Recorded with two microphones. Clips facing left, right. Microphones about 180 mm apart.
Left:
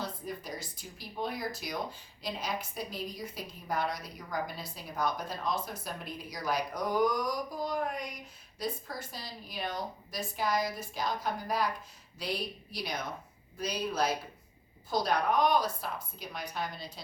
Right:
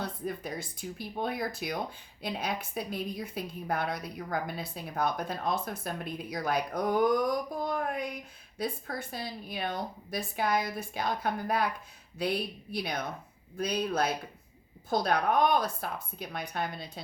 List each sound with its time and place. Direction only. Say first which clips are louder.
0.0 s speech: right 3 dB; 55° right (ahead or behind)